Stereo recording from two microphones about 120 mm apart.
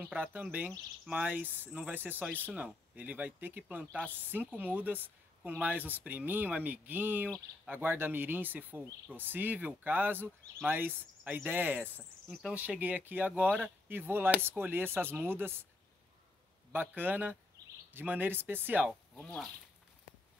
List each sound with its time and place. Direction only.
0.0 s speech: 15° right (ahead or behind)
12.3 s speech: centre (ahead or behind)
12.5 s speech: 15° right (ahead or behind)
16.9 s speech: 15° right (ahead or behind)
19.1 s speech: 10° left (ahead or behind)